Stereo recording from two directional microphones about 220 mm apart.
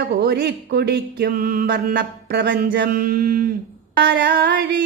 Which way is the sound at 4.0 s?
50° right (ahead or behind).